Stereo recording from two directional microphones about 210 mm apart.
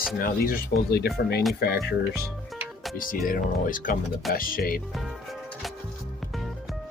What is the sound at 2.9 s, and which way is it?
Speech, 40° left (ahead or behind).